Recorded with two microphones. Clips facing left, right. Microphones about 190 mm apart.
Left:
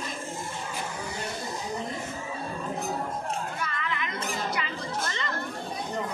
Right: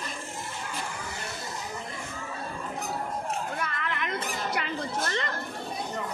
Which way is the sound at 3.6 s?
55° right (ahead or behind).